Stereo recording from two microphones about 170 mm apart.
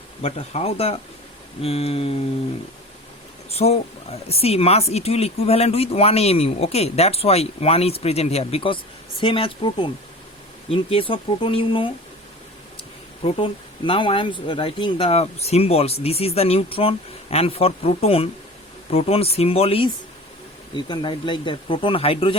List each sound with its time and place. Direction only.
0.2 s speech: 35° left (ahead or behind)
3.5 s speech: 40° left (ahead or behind)
13.2 s speech: 35° left (ahead or behind)